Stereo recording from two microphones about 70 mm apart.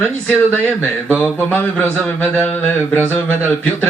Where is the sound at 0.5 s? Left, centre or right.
Right.